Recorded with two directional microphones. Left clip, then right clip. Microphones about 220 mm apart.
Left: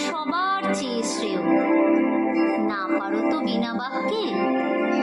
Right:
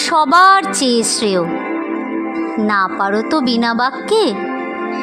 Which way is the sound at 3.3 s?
45° right (ahead or behind).